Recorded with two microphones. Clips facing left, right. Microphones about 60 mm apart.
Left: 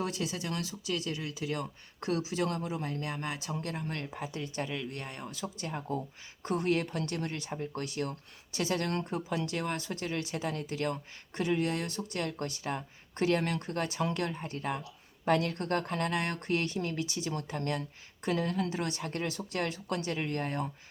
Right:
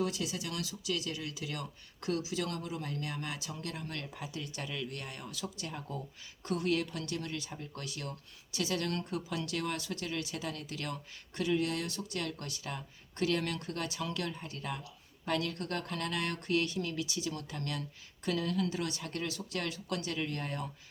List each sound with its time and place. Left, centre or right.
0.0 s speech: left